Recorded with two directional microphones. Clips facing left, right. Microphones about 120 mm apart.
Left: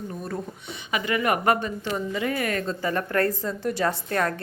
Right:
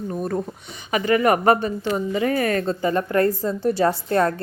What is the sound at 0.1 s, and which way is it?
Speech, 45° right (ahead or behind).